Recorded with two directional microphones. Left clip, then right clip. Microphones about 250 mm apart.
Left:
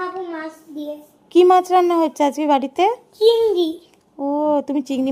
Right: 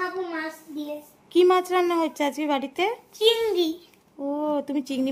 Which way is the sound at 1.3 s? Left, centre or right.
Centre.